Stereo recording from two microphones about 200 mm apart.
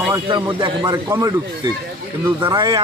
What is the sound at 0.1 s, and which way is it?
Speech, 20° right (ahead or behind).